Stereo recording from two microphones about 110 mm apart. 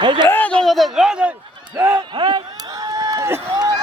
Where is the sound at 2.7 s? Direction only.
35° right (ahead or behind).